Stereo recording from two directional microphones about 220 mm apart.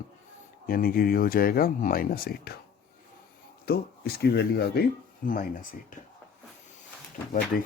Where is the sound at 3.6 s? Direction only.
45° left (ahead or behind).